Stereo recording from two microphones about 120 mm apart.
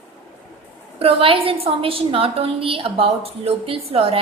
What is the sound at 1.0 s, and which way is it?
A woman's voice, 50° right (ahead or behind).